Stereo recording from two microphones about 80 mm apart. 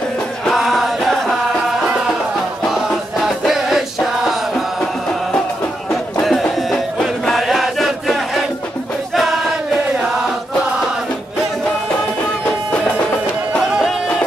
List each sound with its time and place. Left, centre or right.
0.5 s music: centre
2.7 s music: centre
6.2 s music: centre
9.1 s chant: centre
12.4 s music: centre